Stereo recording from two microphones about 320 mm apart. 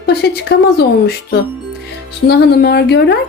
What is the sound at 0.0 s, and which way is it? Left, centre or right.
A woman's voice, left.